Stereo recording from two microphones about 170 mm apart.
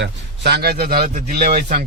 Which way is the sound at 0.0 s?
80° right.